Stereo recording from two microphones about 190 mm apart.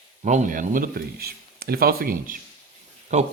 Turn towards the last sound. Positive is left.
turn(degrees=-40)  # may be behind; listen again after turning